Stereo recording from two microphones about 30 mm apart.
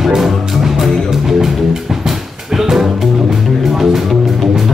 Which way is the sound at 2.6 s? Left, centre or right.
Centre.